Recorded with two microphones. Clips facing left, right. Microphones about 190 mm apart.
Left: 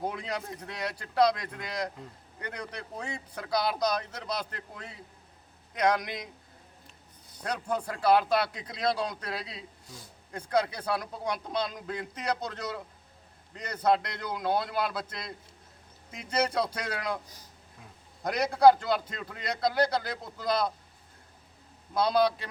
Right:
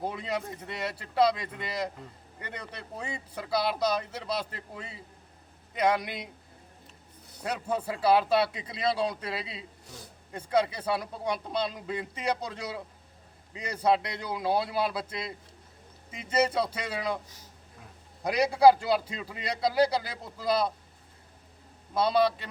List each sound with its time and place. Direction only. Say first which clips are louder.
0.0 s speech: right 1 dB; 5° right (ahead or behind)
7.4 s speech: right 1 dB; 5° right (ahead or behind)
18.2 s a man's voice: right 1 dB; 10° right (ahead or behind)
21.9 s speech: even; centre (ahead or behind)